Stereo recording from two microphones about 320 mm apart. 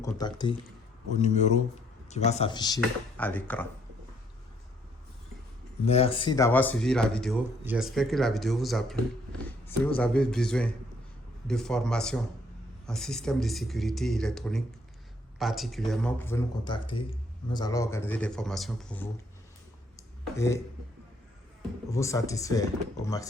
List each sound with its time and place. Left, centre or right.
0.0 s speech: centre
5.8 s speech: centre
20.0 s a sound: centre
21.8 s speech: centre